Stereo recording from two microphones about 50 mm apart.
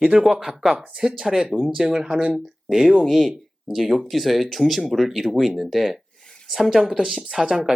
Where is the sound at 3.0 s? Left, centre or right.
Centre.